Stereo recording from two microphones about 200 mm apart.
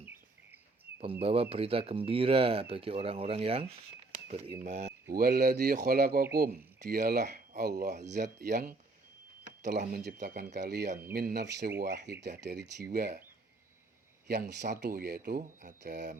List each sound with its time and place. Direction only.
1.2 s speech: 30° right (ahead or behind)
4.1 s a sound: 30° right (ahead or behind)
4.6 s speech: 35° right (ahead or behind)
5.1 s speech: 50° right (ahead or behind)
7.0 s speech: 40° right (ahead or behind)
9.8 s speech: 45° right (ahead or behind)
10.8 s speech: 40° right (ahead or behind)
14.7 s speech: 50° right (ahead or behind)